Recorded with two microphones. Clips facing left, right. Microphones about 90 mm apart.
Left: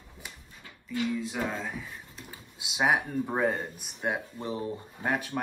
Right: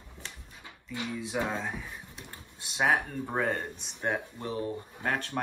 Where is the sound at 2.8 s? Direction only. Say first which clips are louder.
Left 1 dB; 15° left (ahead or behind).